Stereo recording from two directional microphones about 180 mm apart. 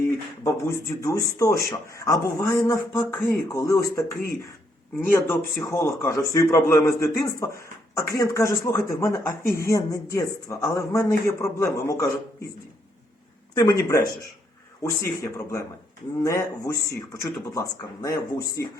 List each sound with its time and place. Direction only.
0.4 s speech: 15° left (ahead or behind)
5.5 s speech: 15° left (ahead or behind)
13.5 s speech: 20° left (ahead or behind)